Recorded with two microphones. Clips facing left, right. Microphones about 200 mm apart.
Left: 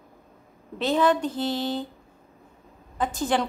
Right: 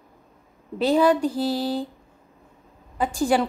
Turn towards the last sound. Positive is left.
turn(degrees=-10)  # may be behind; listen again after turning